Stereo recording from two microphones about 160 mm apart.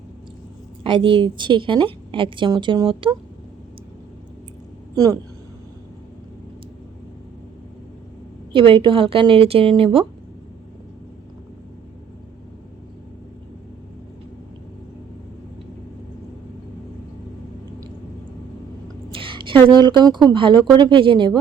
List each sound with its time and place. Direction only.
0.9 s a woman's voice: 30° right (ahead or behind)
8.5 s a woman's voice: 35° right (ahead or behind)
19.1 s a sound: 30° right (ahead or behind)
19.7 s a woman's voice: 25° right (ahead or behind)